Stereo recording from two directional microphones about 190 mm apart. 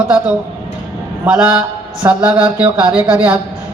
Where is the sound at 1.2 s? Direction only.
5° right (ahead or behind).